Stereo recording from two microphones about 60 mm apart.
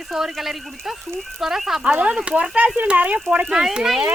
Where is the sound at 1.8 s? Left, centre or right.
Centre.